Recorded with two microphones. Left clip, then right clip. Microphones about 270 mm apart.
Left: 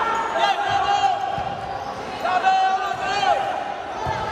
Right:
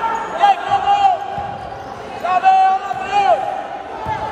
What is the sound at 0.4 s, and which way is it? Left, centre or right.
Basketball bounce, right.